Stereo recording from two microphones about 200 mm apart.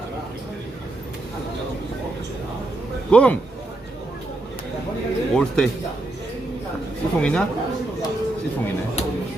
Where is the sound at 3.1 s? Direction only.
5° left (ahead or behind).